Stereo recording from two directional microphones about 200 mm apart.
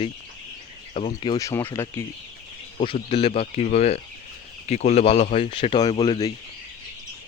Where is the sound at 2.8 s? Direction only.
25° left (ahead or behind).